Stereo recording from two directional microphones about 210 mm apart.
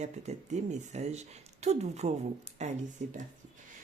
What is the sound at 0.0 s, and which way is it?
Speech, 35° right (ahead or behind).